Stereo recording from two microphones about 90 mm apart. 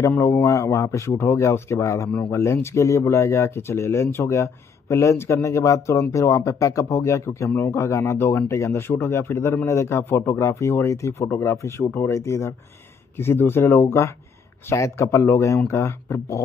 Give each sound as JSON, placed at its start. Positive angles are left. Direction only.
{"t": 0.2, "sound": "speech", "side_deg": 30}